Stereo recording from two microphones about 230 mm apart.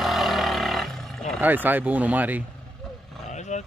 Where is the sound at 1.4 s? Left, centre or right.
Centre.